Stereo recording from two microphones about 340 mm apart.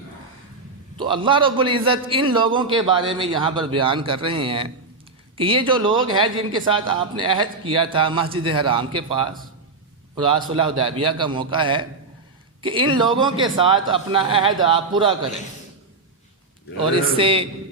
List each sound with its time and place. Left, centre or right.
0.9 s a man's voice: centre
16.9 s a man's voice: centre